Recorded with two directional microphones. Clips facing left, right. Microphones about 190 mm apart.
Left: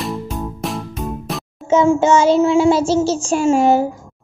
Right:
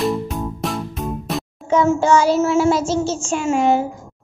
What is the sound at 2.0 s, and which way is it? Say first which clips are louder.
Child singing: left 2 dB; 25° left (ahead or behind).